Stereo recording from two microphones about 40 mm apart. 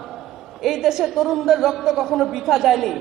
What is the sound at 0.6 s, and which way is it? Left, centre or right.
A man's voice, centre.